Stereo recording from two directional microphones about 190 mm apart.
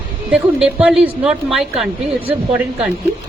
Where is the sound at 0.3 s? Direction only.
5° right (ahead or behind).